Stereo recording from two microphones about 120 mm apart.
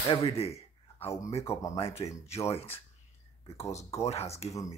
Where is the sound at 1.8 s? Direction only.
55° left (ahead or behind).